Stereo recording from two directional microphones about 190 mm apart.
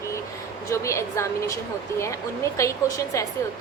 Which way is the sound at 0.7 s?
15° left (ahead or behind).